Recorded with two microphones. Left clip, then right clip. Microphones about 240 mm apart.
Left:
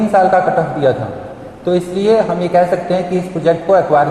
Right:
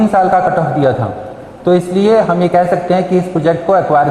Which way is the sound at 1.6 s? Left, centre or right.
Right.